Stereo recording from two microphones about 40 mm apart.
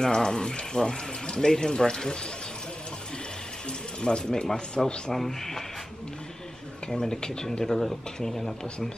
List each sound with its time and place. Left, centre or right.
0.0 s speech: centre
4.0 s speech: centre
5.1 s speech: centre
6.9 s speech: centre